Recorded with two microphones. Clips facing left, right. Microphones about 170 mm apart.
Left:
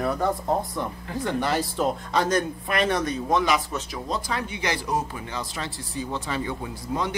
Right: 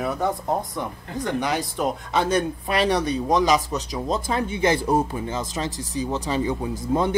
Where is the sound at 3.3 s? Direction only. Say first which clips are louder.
Right 3 dB; 40° right (ahead or behind).